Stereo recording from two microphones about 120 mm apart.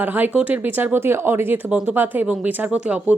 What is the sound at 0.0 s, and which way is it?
Speech, 15° right (ahead or behind).